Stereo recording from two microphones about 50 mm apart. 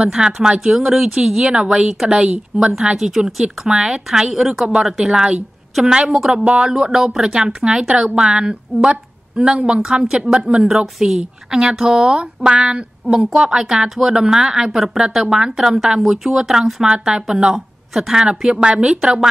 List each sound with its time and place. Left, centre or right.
0.0 s a woman's voice: centre
16.8 s a woman's voice: centre
18.9 s a woman's voice: centre